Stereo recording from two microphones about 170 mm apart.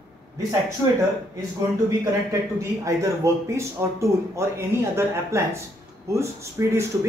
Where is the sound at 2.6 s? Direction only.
20° right (ahead or behind).